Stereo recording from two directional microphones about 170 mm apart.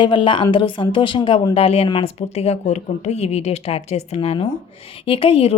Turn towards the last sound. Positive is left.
turn(degrees=30)  # may be behind; listen again after turning